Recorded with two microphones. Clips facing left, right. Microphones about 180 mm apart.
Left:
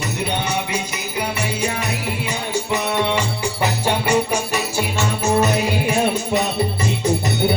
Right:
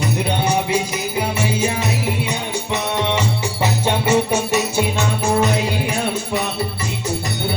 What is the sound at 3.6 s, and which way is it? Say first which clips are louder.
Music: right 1 dB; 25° right (ahead or behind).